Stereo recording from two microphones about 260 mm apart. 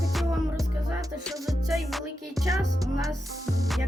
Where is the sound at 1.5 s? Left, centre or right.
Centre.